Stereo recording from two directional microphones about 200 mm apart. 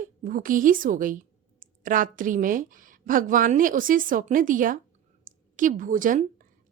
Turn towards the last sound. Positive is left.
turn(degrees=-40)  # may be behind; listen again after turning